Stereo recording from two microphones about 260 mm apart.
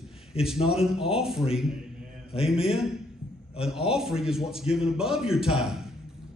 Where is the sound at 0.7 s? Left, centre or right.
Centre.